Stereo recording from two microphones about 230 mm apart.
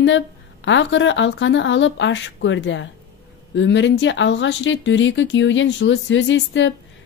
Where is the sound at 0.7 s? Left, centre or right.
Left.